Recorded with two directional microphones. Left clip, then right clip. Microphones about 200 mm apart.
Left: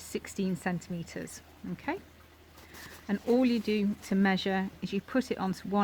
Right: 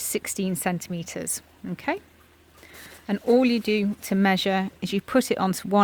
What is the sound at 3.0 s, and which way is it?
Speech, 50° right (ahead or behind).